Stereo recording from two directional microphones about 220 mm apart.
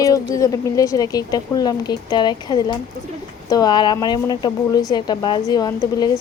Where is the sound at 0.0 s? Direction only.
15° left (ahead or behind).